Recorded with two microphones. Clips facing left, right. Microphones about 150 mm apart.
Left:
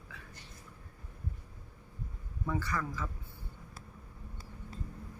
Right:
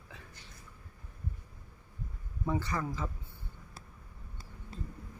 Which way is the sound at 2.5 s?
20° right (ahead or behind).